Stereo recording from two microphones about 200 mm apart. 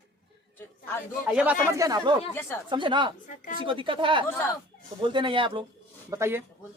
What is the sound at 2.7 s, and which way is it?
Speech, 25° right (ahead or behind).